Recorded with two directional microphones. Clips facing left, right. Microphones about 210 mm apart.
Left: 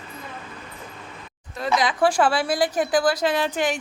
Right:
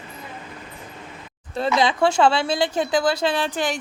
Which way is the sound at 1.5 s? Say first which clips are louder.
Right 3 dB; 25° right (ahead or behind).